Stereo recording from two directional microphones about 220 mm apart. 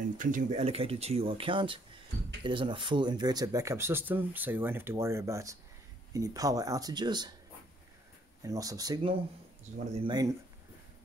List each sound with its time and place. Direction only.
0.2 s speech: 35° right (ahead or behind); by 7.3 s 20° right (ahead or behind)
8.4 s speech: 15° right (ahead or behind)